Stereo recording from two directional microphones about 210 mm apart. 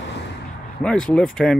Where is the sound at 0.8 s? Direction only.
5° left (ahead or behind).